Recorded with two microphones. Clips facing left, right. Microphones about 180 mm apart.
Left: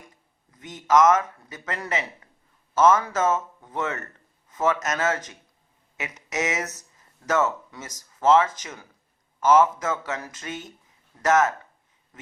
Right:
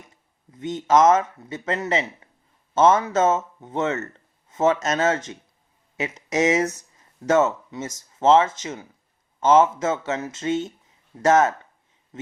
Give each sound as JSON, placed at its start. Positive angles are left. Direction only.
{"t": 0.5, "sound": "a man's voice", "side_deg": -25}